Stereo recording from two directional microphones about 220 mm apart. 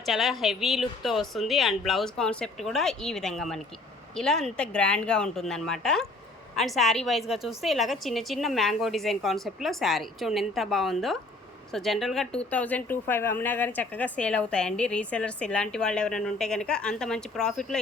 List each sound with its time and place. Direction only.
0.0 s speech: centre (ahead or behind)